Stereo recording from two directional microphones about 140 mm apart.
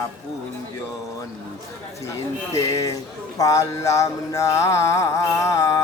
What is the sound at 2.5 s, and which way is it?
Speech, 20° left (ahead or behind).